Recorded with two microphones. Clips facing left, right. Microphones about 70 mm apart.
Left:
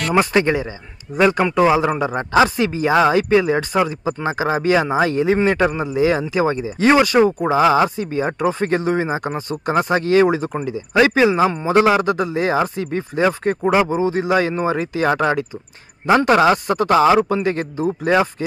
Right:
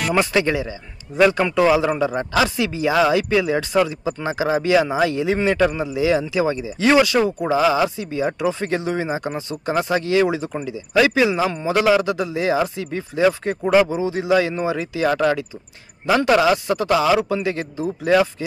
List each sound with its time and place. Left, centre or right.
0.2 s speech: left